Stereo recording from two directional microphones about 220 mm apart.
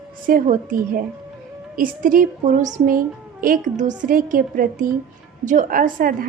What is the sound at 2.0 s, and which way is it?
Speech, 40° right (ahead or behind).